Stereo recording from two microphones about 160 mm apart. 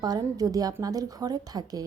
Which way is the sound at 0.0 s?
25° right (ahead or behind).